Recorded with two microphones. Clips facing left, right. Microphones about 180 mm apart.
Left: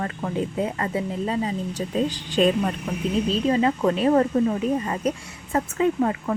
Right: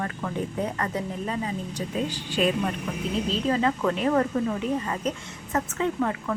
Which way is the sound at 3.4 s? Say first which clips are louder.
Left 3 dB; 20° left (ahead or behind).